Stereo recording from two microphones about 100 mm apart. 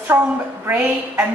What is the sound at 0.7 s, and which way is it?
Speech, 15° right (ahead or behind).